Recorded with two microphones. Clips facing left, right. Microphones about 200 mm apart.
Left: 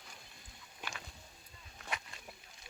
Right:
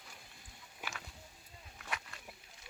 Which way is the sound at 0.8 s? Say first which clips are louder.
Even; 5° right (ahead or behind).